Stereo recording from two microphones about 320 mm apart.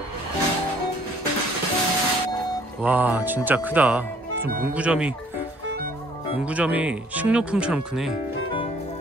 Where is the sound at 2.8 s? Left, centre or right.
Centre.